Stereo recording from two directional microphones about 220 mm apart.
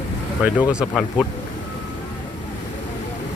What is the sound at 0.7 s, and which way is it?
Speech, centre (ahead or behind).